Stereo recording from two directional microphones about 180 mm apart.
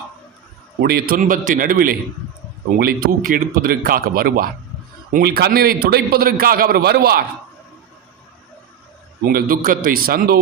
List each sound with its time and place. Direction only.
0.8 s a man's voice: 60° right (ahead or behind)
9.2 s a man's voice: 55° right (ahead or behind)